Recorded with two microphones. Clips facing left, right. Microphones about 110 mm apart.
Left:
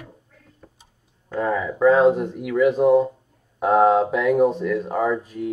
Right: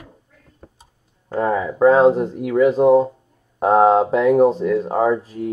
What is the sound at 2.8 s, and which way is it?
Speech, 30° right (ahead or behind).